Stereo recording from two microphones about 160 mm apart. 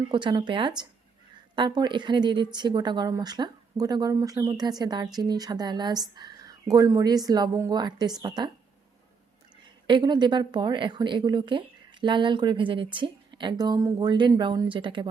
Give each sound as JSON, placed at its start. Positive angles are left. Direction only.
{"t": 0.1, "sound": "a woman's voice", "side_deg": -30}
{"t": 9.8, "sound": "a woman's voice", "side_deg": -30}